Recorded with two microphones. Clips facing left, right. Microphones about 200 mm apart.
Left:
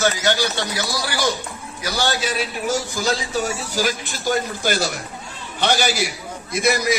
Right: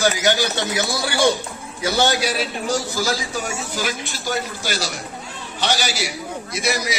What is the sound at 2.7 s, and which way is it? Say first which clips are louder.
Speech: even; 15° left (ahead or behind).